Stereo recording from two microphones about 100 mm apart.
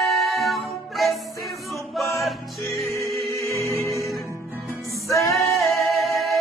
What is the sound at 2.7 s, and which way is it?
Music, 30° left (ahead or behind).